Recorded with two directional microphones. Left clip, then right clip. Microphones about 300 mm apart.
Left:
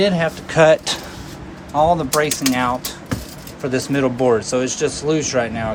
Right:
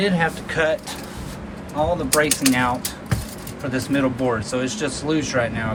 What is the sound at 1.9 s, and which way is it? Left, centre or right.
Speech, centre.